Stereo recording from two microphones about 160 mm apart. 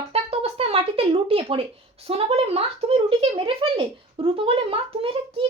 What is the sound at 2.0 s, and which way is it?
Speech, 40° right (ahead or behind).